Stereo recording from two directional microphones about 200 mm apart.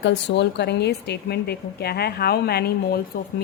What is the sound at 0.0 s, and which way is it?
A woman's voice, 60° left (ahead or behind).